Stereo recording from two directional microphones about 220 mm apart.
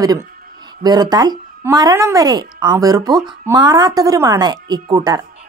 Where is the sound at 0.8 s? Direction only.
20° right (ahead or behind).